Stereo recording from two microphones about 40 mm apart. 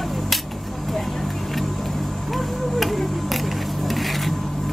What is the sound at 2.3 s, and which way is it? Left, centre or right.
Music, centre.